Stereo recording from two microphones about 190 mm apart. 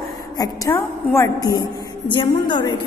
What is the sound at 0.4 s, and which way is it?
A woman's voice, 15° left (ahead or behind).